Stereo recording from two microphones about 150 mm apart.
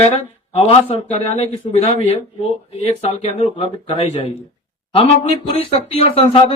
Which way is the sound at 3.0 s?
45° left (ahead or behind).